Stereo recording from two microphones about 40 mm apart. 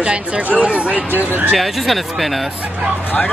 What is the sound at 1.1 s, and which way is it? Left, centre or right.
Speech, right.